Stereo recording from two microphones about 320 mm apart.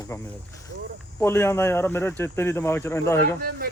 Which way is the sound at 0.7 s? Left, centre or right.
Right.